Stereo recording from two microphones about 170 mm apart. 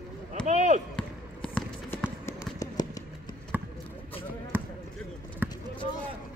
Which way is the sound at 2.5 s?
20° left (ahead or behind).